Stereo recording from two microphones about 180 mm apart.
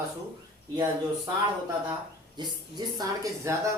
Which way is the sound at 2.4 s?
25° right (ahead or behind).